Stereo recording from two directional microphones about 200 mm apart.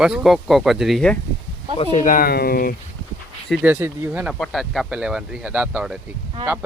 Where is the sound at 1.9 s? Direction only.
40° left (ahead or behind).